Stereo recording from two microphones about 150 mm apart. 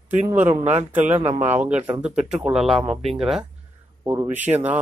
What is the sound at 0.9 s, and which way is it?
Speech, 10° right (ahead or behind).